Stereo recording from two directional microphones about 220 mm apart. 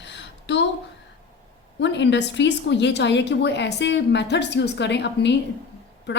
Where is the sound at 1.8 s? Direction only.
55° left (ahead or behind).